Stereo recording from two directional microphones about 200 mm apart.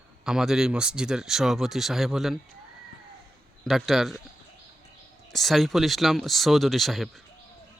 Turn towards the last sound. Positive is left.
turn(degrees=0)  # may be behind; listen again after turning